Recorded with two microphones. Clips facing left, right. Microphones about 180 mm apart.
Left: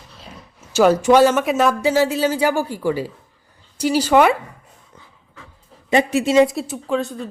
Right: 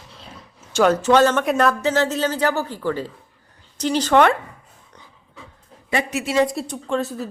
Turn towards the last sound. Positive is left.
turn(degrees=-5)  # may be behind; listen again after turning